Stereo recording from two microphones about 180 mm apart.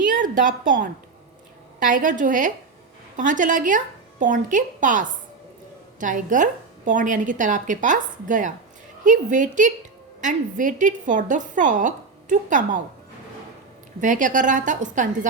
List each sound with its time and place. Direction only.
0.0 s a sound: 45° right (ahead or behind)
1.8 s a woman's voice: 50° right (ahead or behind)
14.0 s a woman's voice: 45° right (ahead or behind)